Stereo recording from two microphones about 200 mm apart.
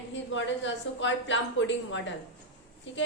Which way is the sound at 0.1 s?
65° left (ahead or behind).